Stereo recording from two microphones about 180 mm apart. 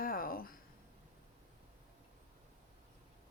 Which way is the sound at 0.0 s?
55° left (ahead or behind).